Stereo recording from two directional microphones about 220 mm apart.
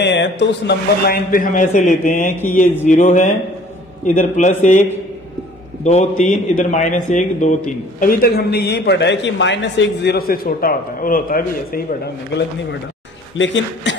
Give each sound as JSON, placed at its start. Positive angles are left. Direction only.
{"t": 0.0, "sound": "speech", "side_deg": 50}
{"t": 5.9, "sound": "a man's voice", "side_deg": 30}
{"t": 13.4, "sound": "a man's voice", "side_deg": 55}